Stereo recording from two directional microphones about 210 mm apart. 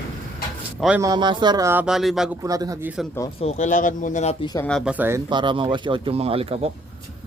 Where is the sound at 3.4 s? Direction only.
35° left (ahead or behind).